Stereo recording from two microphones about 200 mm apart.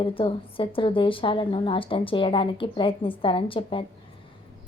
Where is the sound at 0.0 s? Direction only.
25° left (ahead or behind).